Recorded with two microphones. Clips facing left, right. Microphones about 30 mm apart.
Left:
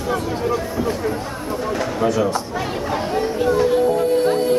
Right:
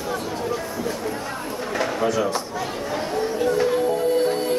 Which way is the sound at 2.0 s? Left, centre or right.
Centre.